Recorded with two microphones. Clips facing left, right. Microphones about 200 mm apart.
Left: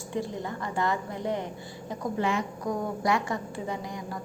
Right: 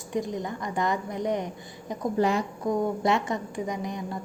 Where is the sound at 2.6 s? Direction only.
25° right (ahead or behind).